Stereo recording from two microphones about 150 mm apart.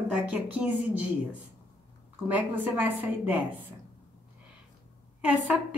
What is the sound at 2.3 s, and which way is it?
Speech, 10° right (ahead or behind).